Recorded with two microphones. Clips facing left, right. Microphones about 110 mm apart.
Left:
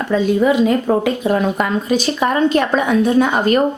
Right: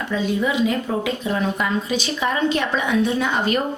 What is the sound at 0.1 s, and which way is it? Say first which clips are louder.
Speech: left 8 dB; 50° left (ahead or behind).